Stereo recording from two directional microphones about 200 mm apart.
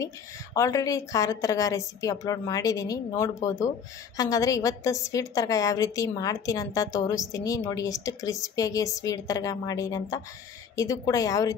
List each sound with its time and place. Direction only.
0.6 s a woman's voice: 15° left (ahead or behind)